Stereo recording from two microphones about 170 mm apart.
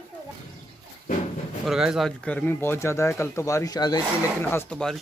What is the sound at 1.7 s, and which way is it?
Speech, centre (ahead or behind).